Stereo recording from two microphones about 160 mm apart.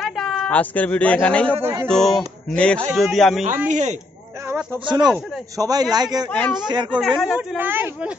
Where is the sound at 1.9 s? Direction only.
Centre (ahead or behind).